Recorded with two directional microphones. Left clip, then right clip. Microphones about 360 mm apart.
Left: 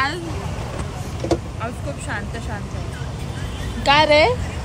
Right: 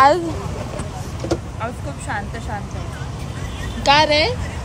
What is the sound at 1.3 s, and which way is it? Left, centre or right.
Speech, centre.